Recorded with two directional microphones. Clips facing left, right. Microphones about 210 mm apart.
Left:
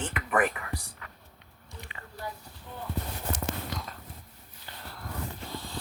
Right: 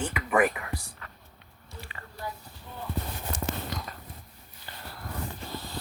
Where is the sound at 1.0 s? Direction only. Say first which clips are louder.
Right 1 dB; 10° left (ahead or behind).